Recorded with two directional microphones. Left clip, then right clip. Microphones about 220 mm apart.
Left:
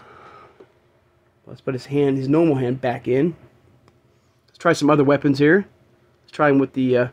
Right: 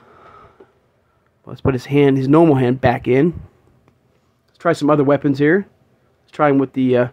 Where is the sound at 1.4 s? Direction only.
25° right (ahead or behind).